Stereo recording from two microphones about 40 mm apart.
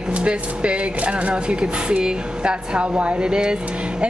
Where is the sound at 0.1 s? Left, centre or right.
Right.